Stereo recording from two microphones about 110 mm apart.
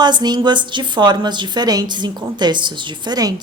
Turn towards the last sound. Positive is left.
turn(degrees=-40)  # may be behind; listen again after turning